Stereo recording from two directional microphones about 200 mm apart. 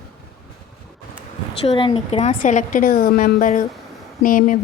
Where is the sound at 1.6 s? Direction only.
25° left (ahead or behind); by 4.5 s 40° left (ahead or behind).